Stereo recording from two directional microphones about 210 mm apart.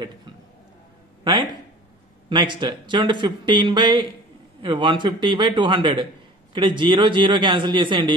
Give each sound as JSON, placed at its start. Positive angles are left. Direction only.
{"t": 2.2, "sound": "speech", "side_deg": -20}